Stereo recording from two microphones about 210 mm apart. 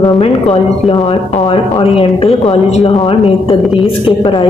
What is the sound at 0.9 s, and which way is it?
Speech, 25° left (ahead or behind).